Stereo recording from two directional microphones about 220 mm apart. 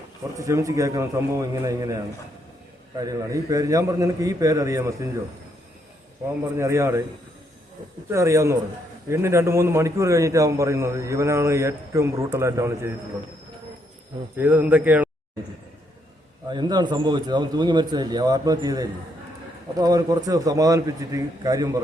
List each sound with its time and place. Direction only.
0.3 s a man's voice: 15° right (ahead or behind)
6.6 s a man's voice: 15° right (ahead or behind)
8.1 s a man's voice: 15° right (ahead or behind)
14.3 s a man's voice: 10° right (ahead or behind)
16.5 s a man's voice: 20° right (ahead or behind)